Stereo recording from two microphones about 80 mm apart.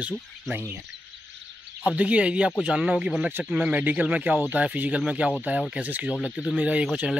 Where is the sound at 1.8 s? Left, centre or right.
Centre.